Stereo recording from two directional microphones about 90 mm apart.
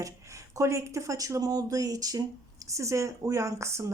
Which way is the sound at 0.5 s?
35° right (ahead or behind).